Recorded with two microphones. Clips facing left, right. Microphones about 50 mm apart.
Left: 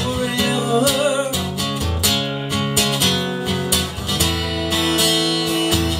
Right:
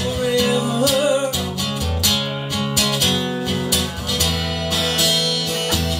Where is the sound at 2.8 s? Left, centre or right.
Centre.